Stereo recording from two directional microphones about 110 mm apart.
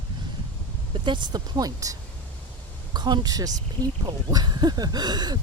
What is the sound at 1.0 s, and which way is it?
Speech, 45° right (ahead or behind).